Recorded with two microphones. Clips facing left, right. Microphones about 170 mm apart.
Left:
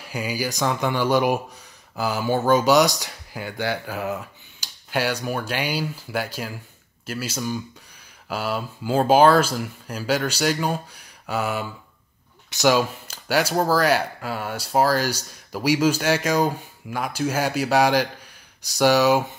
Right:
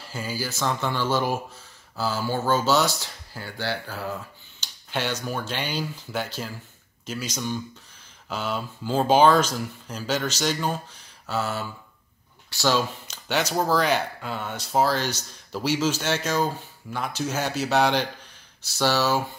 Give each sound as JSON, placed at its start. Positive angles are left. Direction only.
{"t": 0.0, "sound": "speech", "side_deg": 15}
{"t": 4.6, "sound": "tick-tock", "side_deg": 10}
{"t": 4.9, "sound": "speech", "side_deg": 10}